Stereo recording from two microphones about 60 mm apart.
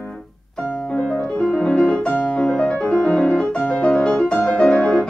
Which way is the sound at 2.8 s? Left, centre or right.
Centre.